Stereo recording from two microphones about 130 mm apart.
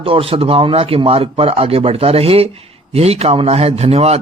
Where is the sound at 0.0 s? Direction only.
45° right (ahead or behind).